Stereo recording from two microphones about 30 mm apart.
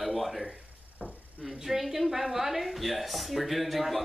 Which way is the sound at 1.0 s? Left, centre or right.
Left.